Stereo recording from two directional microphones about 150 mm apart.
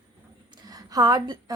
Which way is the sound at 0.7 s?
25° right (ahead or behind).